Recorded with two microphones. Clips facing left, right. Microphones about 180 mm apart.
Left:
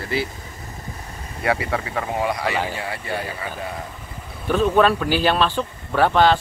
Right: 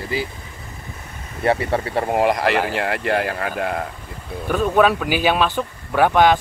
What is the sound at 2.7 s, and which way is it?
Speech, 85° right.